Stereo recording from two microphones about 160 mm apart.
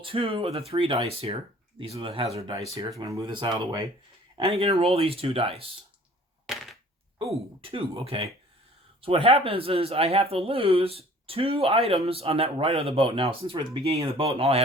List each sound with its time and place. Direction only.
0.0 s speech: 35° right (ahead or behind)
7.6 s speech: 35° right (ahead or behind)